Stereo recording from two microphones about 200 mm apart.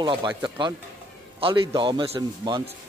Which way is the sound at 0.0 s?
25° right (ahead or behind).